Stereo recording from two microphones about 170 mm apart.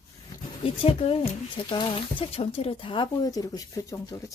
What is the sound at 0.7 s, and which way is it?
Speech, 35° left (ahead or behind).